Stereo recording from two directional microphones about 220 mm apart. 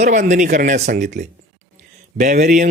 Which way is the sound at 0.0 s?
35° right (ahead or behind).